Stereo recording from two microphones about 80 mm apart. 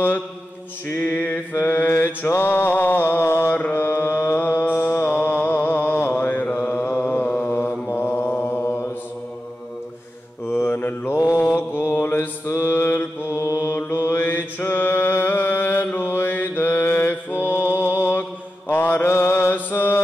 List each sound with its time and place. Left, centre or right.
0.8 s mantra: left
10.4 s mantra: left
14.1 s mantra: left
17.5 s a sound: left
18.7 s mantra: left